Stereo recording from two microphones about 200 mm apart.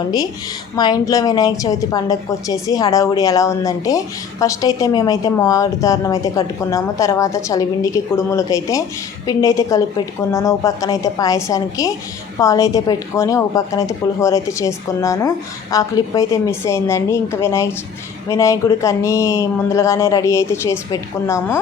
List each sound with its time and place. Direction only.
0.8 s a woman's voice: 20° left (ahead or behind)